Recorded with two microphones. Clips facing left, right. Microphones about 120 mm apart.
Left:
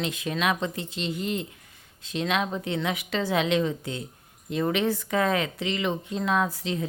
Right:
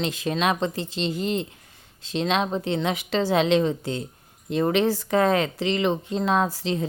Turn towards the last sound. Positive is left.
turn(degrees=-35)  # may be behind; listen again after turning